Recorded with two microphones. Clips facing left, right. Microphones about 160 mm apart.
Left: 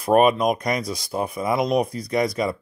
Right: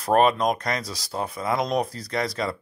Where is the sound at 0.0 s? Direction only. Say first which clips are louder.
Left 3 dB; 10° left (ahead or behind).